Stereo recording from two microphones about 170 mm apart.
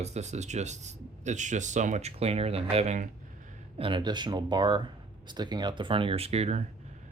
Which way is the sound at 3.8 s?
30° right (ahead or behind).